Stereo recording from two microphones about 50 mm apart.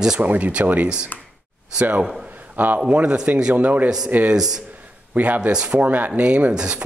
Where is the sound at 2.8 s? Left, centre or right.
Right.